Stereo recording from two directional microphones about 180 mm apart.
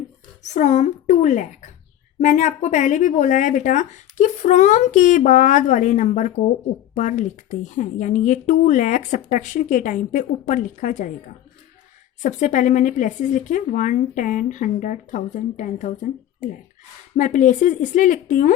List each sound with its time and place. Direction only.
0.4 s speech: 40° left (ahead or behind)
12.2 s speech: 45° left (ahead or behind)